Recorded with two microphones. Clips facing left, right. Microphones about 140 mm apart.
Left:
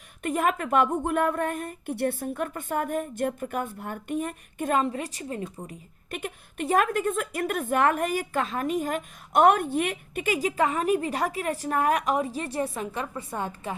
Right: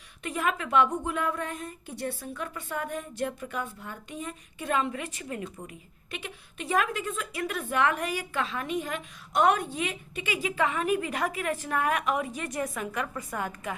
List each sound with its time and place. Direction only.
0.2 s a woman's voice: 50° left (ahead or behind)
6.1 s a woman's voice: 50° left (ahead or behind); by 13.7 s 30° left (ahead or behind)